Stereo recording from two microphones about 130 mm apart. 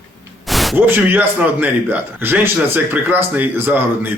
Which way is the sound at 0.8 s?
15° right (ahead or behind).